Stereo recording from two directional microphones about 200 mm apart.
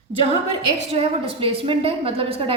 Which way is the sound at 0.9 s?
30° right (ahead or behind).